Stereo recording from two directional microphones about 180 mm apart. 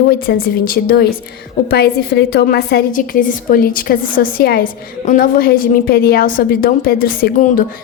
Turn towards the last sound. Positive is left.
turn(degrees=55)  # may be behind; listen again after turning